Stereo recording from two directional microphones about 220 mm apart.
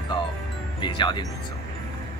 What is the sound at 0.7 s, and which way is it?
Speech, 20° left (ahead or behind).